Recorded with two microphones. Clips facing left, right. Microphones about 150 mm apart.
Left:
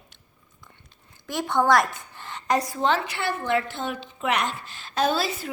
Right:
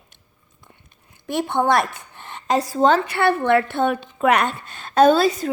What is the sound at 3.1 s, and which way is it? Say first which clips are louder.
A woman's voice: right 8 dB; 60° right (ahead or behind).